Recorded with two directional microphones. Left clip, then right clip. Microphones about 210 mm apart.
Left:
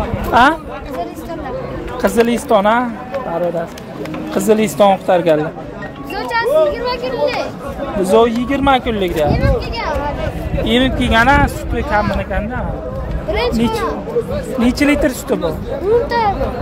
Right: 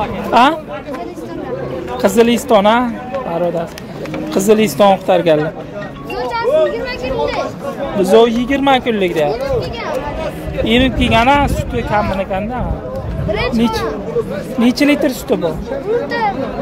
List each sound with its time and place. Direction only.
0.3 s speech: 5° right (ahead or behind)
2.0 s speech: 10° right (ahead or behind)
4.3 s speech: 10° right (ahead or behind)
6.1 s music: 50° left (ahead or behind)
6.7 s a sound: 55° left (ahead or behind)
8.0 s speech: 5° right (ahead or behind)
10.6 s speech: centre (ahead or behind)
13.3 s speech: 45° left (ahead or behind)
14.6 s speech: 5° right (ahead or behind)
16.1 s speech: 45° left (ahead or behind)